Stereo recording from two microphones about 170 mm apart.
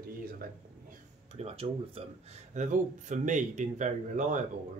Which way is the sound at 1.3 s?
35° right (ahead or behind).